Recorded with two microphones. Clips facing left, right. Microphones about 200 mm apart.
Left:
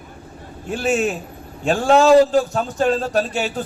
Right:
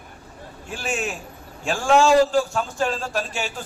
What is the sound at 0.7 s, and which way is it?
A man's voice, 35° left (ahead or behind).